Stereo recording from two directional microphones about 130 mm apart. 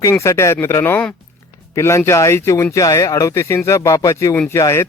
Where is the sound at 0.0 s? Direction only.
20° left (ahead or behind).